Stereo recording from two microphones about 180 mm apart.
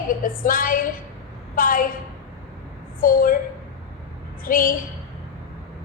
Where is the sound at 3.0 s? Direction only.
50° left (ahead or behind).